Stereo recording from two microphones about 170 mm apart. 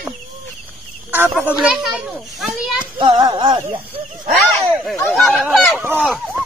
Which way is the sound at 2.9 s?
30° right (ahead or behind).